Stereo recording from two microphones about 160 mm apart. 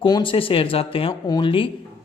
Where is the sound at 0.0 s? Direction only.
30° left (ahead or behind).